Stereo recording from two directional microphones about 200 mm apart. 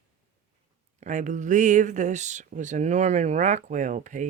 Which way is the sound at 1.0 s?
40° right (ahead or behind).